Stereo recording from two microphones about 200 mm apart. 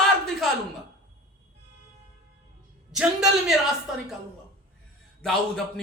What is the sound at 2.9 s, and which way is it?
Speech, centre (ahead or behind).